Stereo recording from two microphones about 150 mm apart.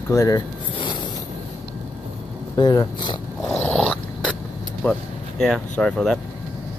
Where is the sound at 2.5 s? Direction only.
30° left (ahead or behind).